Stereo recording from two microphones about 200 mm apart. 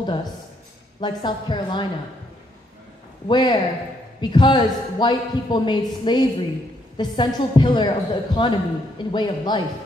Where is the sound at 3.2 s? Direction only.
20° left (ahead or behind).